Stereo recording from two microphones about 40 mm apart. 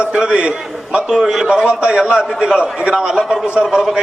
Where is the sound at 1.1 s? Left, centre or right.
Centre.